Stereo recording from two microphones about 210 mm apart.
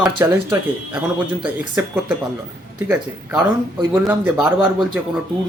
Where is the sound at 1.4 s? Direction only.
5° right (ahead or behind).